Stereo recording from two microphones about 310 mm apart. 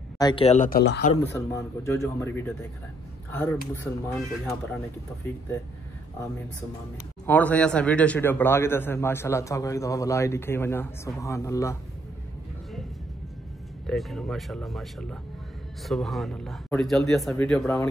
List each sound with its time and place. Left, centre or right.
0.2 s speech: centre
1.3 s a man's voice: centre
3.8 s speech: centre
7.2 s a man's voice: centre
13.8 s speech: centre